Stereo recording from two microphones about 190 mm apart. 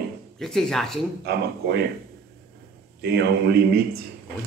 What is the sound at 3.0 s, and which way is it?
Speech, 55° right (ahead or behind).